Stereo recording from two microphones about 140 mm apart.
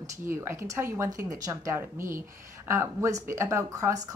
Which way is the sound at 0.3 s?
20° right (ahead or behind).